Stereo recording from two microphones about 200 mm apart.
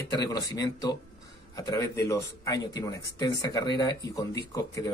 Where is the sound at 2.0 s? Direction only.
15° left (ahead or behind).